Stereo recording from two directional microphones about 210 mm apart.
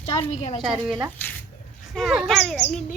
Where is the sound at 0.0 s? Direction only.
30° left (ahead or behind).